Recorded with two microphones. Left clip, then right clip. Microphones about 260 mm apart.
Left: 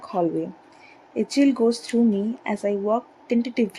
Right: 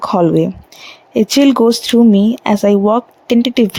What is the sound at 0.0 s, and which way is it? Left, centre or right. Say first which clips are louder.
Speech: right 12 dB; right.